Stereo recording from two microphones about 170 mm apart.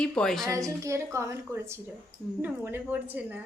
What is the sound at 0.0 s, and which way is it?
Speech, 5° left (ahead or behind).